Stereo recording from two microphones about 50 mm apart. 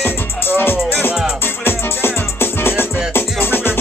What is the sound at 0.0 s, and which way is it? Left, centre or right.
Music, left.